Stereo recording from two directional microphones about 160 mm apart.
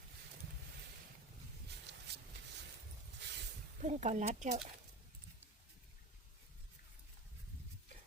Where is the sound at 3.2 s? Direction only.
90° right.